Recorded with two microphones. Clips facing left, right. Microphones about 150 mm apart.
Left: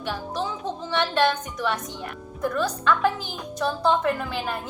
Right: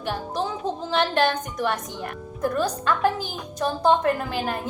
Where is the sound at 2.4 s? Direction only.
45° right (ahead or behind).